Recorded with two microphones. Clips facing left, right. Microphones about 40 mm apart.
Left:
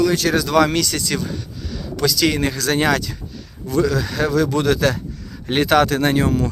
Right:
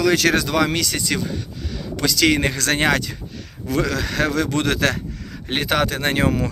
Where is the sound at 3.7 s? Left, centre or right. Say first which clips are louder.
Left 3 dB; right.